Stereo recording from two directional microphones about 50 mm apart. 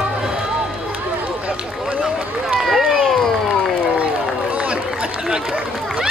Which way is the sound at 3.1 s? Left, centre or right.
Centre.